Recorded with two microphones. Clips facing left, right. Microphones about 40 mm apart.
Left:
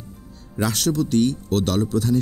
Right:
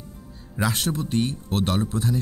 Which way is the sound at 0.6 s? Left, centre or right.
Right.